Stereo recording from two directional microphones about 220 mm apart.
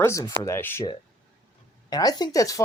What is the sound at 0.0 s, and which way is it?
Speech, 10° left (ahead or behind).